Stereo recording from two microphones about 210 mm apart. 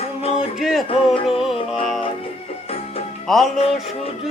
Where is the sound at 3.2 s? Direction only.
Centre (ahead or behind).